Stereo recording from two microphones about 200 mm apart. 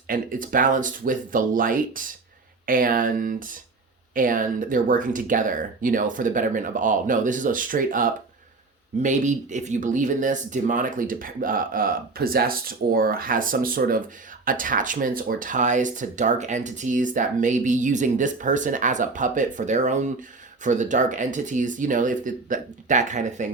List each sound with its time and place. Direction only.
0.1 s speech: 45° right (ahead or behind)